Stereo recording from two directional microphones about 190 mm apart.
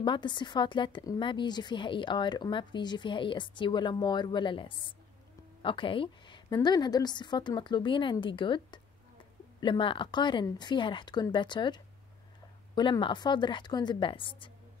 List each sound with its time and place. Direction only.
0.0 s a woman's voice: 25° left (ahead or behind)